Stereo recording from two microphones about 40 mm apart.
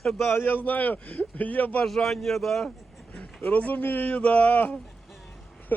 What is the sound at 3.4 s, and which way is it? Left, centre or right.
Speech, left.